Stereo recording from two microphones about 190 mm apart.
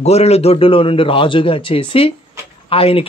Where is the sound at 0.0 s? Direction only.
35° left (ahead or behind).